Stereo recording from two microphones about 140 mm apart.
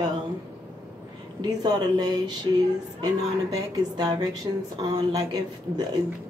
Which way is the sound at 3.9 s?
30° right (ahead or behind).